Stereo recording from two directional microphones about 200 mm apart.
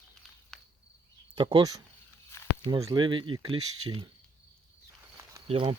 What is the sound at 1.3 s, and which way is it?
Speech, 20° right (ahead or behind).